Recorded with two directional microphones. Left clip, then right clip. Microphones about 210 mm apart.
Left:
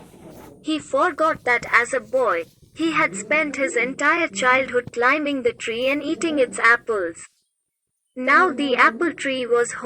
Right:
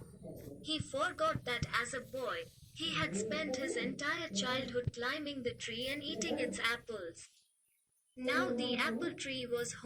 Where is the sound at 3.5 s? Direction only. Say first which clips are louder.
Left 16 dB; 25° left (ahead or behind).